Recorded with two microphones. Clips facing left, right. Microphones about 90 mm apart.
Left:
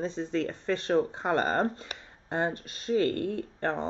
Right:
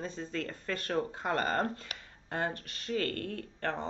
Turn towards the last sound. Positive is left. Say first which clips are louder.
# left 5 dB
turn(degrees=20)  # may be behind; listen again after turning